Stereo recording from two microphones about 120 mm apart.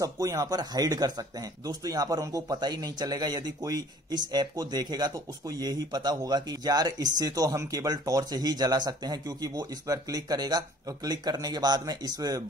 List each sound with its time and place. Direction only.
0.0 s speech: 30° right (ahead or behind)